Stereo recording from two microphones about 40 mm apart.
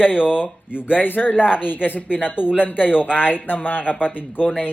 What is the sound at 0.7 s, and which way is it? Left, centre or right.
Speech, right.